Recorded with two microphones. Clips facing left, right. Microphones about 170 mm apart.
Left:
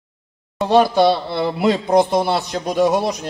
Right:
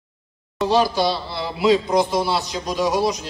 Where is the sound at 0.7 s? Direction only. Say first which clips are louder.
Left 5 dB; 55° left (ahead or behind).